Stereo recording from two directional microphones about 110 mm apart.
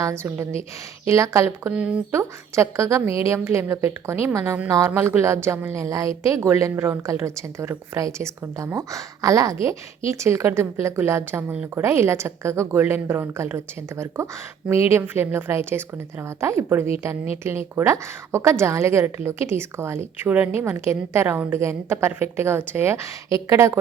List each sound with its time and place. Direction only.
0.0 s a woman's voice: 25° right (ahead or behind)
2.1 s a woman's voice: 25° right (ahead or behind)